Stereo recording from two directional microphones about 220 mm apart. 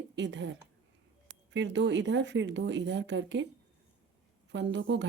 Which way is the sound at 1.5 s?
55° right (ahead or behind).